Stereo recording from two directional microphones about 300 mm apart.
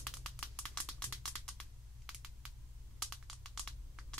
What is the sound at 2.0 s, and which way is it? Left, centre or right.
Computer keyboard, centre.